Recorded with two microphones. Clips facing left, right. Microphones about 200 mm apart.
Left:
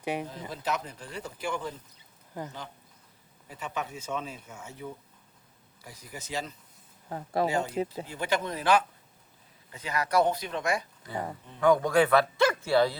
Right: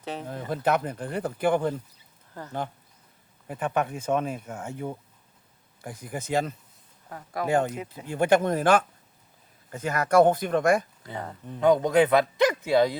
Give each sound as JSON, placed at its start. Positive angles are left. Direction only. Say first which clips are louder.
{"t": 0.0, "sound": "speech", "louder": "left 3 dB", "side_deg": 10}
{"t": 0.3, "sound": "speech", "louder": "right 8 dB", "side_deg": -55}
{"t": 2.3, "sound": "speech", "louder": "left 3 dB", "side_deg": 15}
{"t": 3.4, "sound": "speech", "louder": "right 9 dB", "side_deg": -55}
{"t": 7.1, "sound": "speech", "louder": "left 4 dB", "side_deg": 25}
{"t": 7.4, "sound": "speech", "louder": "right 6 dB", "side_deg": -55}
{"t": 11.6, "sound": "a man's voice", "louder": "right 3 dB", "side_deg": -20}